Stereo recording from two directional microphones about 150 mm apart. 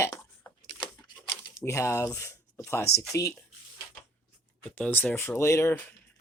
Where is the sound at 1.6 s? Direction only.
20° left (ahead or behind).